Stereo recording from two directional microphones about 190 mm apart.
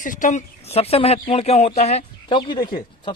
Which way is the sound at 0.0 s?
40° left (ahead or behind).